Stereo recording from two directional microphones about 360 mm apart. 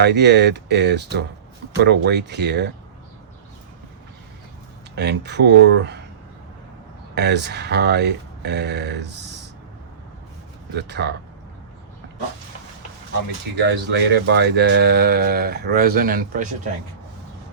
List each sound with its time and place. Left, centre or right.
0.0 s speech: right
4.9 s speech: right
7.2 s speech: right
10.8 s speech: right
13.6 s speech: right